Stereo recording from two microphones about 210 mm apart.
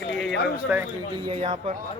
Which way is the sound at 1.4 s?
30° right (ahead or behind).